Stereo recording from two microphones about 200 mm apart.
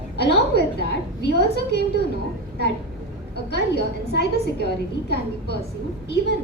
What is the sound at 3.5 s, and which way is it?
A woman's voice, 55° left (ahead or behind).